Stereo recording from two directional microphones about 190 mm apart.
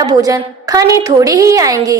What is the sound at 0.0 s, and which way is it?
A woman's voice, 20° right (ahead or behind).